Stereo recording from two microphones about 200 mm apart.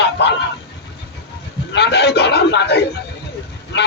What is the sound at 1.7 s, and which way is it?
A man's voice, 60° left (ahead or behind).